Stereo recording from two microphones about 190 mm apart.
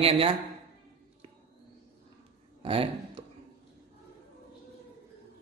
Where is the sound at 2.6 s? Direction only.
30° right (ahead or behind).